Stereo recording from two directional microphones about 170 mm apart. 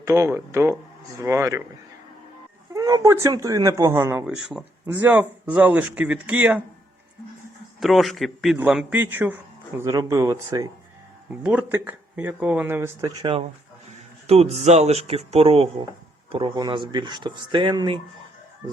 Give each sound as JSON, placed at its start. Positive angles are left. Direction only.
{"t": 0.0, "sound": "speech", "side_deg": -15}
{"t": 2.7, "sound": "speech", "side_deg": -20}
{"t": 4.3, "sound": "a man's voice", "side_deg": 0}
{"t": 7.8, "sound": "a man's voice", "side_deg": 0}
{"t": 14.3, "sound": "speech", "side_deg": -35}